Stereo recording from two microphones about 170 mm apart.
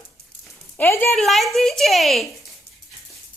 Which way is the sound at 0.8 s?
15° left (ahead or behind).